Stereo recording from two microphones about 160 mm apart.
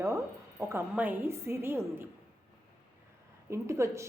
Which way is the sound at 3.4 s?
15° right (ahead or behind).